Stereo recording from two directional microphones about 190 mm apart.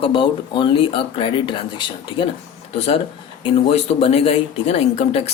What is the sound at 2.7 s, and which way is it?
Speech, 35° left (ahead or behind).